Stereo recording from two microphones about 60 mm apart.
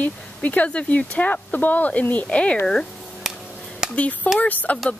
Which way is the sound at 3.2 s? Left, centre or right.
Centre.